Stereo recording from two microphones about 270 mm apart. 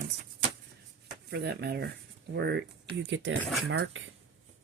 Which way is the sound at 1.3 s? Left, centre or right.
Right.